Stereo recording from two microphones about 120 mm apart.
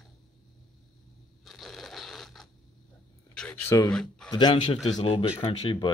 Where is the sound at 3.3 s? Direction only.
10° left (ahead or behind).